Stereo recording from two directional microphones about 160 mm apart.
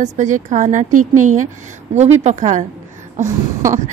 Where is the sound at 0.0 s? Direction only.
50° right (ahead or behind).